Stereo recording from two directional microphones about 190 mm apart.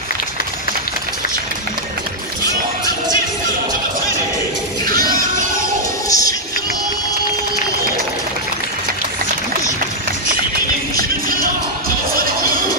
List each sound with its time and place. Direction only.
6.0 s music: 20° left (ahead or behind)
11.0 s music: 50° right (ahead or behind)